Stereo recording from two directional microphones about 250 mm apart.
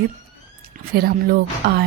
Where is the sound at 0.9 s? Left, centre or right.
Right.